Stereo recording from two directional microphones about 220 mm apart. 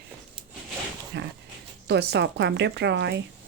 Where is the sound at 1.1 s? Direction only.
50° right (ahead or behind).